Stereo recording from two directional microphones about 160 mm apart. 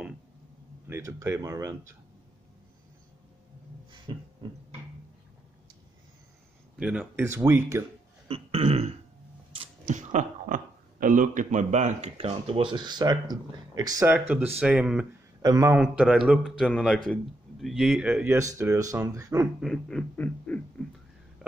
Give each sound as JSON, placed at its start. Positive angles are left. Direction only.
{"t": 0.8, "sound": "speech", "side_deg": -15}
{"t": 3.9, "sound": "beatboxing", "side_deg": -30}
{"t": 6.8, "sound": "speech", "side_deg": -5}
{"t": 8.3, "sound": "a sound", "side_deg": -35}
{"t": 9.5, "sound": "arrow", "side_deg": -35}
{"t": 9.9, "sound": "speech", "side_deg": -55}
{"t": 14.0, "sound": "speech", "side_deg": -10}
{"t": 15.4, "sound": "speech", "side_deg": -20}
{"t": 15.8, "sound": "speech", "side_deg": -5}
{"t": 19.6, "sound": "speech", "side_deg": 5}